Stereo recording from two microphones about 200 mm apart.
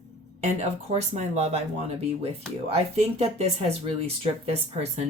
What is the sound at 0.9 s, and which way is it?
Speech, 35° right (ahead or behind).